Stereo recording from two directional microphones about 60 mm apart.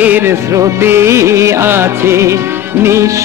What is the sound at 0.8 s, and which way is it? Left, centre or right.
Music, right.